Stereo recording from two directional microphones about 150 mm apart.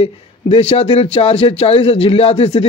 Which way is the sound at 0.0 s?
40° left (ahead or behind).